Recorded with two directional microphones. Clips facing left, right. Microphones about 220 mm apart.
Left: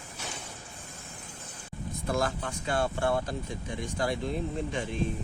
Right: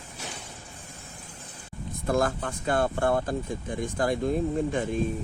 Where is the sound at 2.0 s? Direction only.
55° right (ahead or behind).